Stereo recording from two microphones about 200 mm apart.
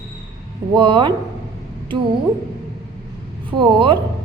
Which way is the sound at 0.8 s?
25° right (ahead or behind).